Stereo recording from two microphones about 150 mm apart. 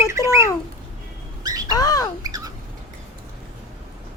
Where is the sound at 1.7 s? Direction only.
25° left (ahead or behind).